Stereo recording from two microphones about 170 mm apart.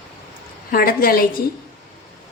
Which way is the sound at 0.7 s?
60° left (ahead or behind).